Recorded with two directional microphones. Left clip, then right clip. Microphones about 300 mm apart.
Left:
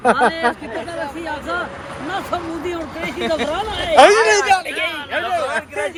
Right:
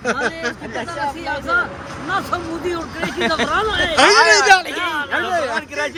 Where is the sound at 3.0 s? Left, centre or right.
Right.